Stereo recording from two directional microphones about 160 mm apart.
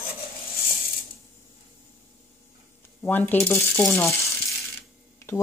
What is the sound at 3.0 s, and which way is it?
Speech, 10° left (ahead or behind).